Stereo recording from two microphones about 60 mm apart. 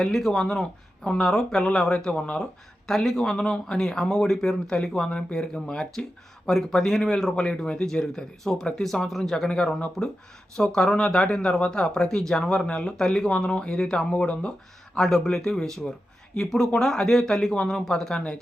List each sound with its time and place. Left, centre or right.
0.0 s speech: centre
2.4 s speech: centre
4.7 s speech: centre